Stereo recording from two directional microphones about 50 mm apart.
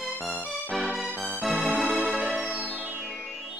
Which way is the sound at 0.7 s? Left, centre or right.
Centre.